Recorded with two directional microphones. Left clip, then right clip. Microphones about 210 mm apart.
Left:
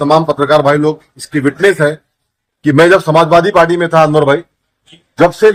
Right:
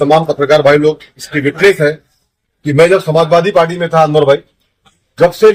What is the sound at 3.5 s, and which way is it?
A man's voice, 30° left (ahead or behind).